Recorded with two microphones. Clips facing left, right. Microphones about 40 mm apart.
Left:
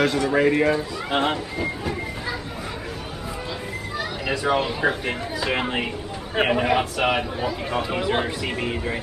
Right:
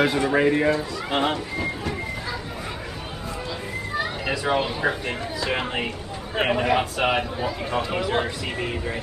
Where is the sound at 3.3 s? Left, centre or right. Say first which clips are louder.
Even; centre.